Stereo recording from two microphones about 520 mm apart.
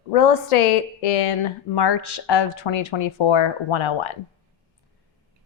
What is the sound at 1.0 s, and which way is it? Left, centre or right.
Speech, left.